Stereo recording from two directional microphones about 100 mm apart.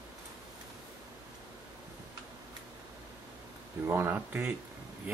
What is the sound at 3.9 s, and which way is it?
Speech, 25° right (ahead or behind).